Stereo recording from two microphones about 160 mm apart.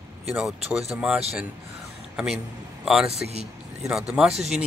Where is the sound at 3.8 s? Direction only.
5° right (ahead or behind).